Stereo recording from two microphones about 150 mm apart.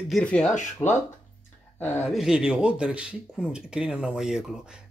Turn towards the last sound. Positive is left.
turn(degrees=-5)  # may be behind; listen again after turning